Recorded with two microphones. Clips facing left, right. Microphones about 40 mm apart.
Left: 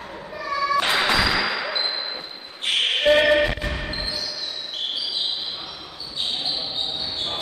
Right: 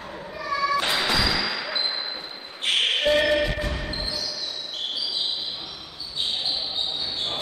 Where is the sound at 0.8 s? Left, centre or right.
Centre.